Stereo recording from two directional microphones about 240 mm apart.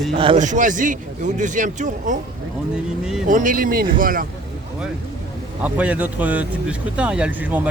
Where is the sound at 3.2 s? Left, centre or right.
Right.